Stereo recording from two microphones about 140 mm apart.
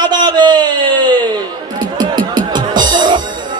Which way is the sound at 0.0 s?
30° right (ahead or behind).